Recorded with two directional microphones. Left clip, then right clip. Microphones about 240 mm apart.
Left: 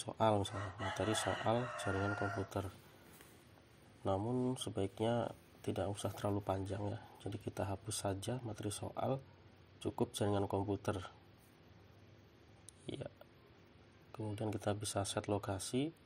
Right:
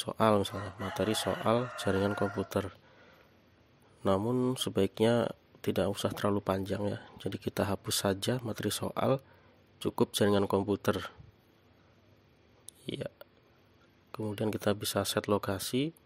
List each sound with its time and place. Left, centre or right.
0.0 s speech: right
4.0 s speech: right
12.8 s speech: right
14.1 s speech: right